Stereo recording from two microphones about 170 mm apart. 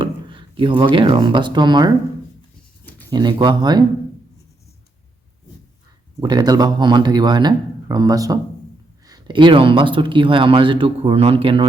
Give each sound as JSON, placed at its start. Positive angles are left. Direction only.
{"t": 0.0, "sound": "speech", "side_deg": -30}
{"t": 3.1, "sound": "speech", "side_deg": -25}
{"t": 6.1, "sound": "speech", "side_deg": -25}